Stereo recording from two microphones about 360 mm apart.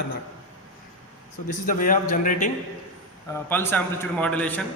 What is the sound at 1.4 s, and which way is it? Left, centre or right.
Speech, left.